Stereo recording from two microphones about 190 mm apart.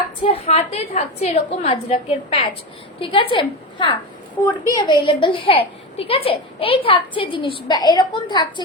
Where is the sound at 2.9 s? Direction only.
30° left (ahead or behind).